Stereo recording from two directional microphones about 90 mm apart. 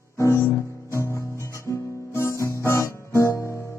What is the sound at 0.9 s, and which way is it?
Music, 30° left (ahead or behind).